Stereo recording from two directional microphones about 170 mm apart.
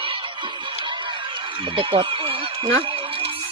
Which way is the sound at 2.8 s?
30° right (ahead or behind).